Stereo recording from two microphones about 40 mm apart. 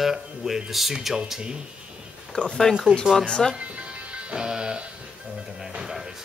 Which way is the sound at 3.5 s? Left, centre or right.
Right.